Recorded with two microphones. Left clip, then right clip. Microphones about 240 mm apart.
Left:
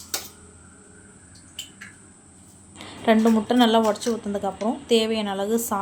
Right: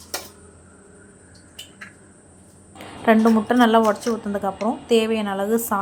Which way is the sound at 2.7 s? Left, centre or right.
Centre.